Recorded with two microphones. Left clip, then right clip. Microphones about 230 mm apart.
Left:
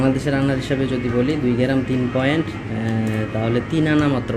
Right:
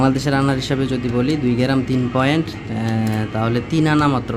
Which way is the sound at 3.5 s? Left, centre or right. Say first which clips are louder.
Right 1 dB; right.